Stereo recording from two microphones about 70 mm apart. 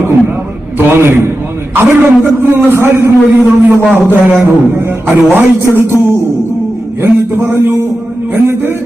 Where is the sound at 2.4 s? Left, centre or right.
Right.